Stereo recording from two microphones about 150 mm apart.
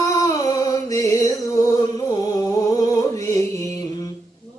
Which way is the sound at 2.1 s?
30° left (ahead or behind).